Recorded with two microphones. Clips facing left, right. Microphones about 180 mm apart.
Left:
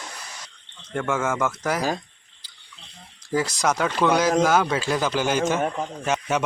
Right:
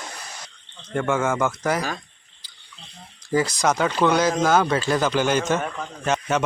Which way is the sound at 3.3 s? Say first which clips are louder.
Right 2 dB; 5° left (ahead or behind).